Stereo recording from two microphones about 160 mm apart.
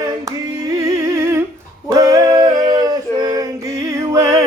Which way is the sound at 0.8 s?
20° right (ahead or behind).